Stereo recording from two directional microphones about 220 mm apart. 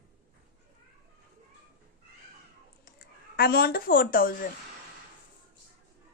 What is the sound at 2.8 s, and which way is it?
Speech, 40° left (ahead or behind).